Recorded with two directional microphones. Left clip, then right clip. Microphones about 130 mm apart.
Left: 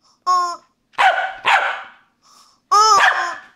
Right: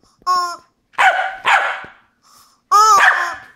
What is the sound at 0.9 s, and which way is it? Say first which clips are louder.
Dog: right 1 dB; 10° right (ahead or behind).